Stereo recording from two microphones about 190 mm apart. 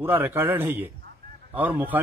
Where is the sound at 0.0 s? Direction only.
10° right (ahead or behind).